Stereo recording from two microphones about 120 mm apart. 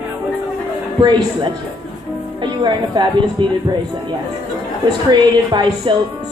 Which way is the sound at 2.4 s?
35° right (ahead or behind).